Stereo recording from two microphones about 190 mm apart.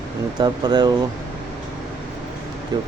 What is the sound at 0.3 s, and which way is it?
Speech, 20° right (ahead or behind).